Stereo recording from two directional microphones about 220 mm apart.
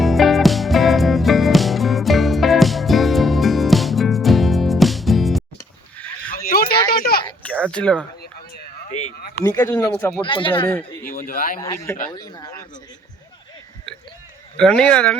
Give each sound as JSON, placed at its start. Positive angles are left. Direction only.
{"t": 0.0, "sound": "music", "side_deg": 0}
{"t": 6.0, "sound": "a sound", "side_deg": 5}
{"t": 6.3, "sound": "a sound", "side_deg": 40}
{"t": 7.7, "sound": "speech", "side_deg": 5}
{"t": 8.9, "sound": "a sound", "side_deg": 30}
{"t": 9.4, "sound": "speech", "side_deg": 15}
{"t": 10.2, "sound": "speech", "side_deg": 25}
{"t": 11.0, "sound": "speech", "side_deg": 40}
{"t": 11.6, "sound": "speech", "side_deg": 15}
{"t": 14.6, "sound": "speech", "side_deg": 5}